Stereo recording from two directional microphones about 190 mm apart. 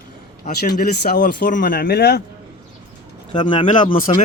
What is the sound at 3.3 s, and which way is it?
Speech, 25° left (ahead or behind).